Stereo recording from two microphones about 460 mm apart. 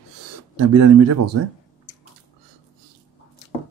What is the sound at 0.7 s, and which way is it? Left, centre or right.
Speech, right.